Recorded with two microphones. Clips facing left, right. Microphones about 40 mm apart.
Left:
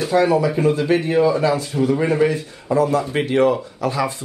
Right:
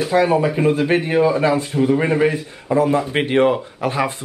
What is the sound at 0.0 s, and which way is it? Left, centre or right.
Speech, centre.